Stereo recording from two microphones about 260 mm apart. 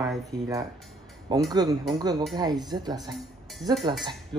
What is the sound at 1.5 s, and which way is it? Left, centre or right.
Speech, centre.